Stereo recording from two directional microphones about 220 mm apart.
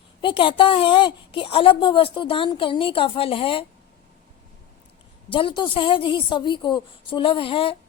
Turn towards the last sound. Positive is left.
turn(degrees=25)  # may be behind; listen again after turning